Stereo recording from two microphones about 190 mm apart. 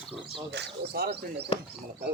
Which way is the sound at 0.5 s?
60° right (ahead or behind).